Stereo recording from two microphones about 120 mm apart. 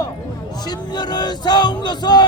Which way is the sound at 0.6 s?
35° left (ahead or behind).